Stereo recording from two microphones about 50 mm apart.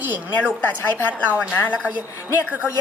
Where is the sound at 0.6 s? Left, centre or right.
Left.